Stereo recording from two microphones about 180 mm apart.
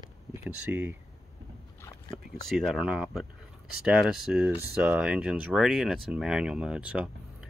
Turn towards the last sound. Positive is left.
turn(degrees=-5)  # may be behind; listen again after turning